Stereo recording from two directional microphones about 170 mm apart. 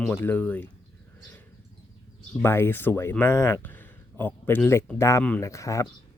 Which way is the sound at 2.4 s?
15° left (ahead or behind).